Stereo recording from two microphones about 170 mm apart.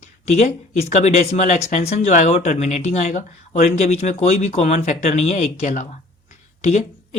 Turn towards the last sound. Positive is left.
turn(degrees=40)  # may be behind; listen again after turning